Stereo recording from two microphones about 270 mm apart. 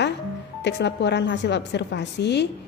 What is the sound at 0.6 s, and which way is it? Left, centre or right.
A woman's voice, left.